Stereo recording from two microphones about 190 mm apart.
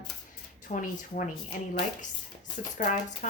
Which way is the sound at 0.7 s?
45° left (ahead or behind).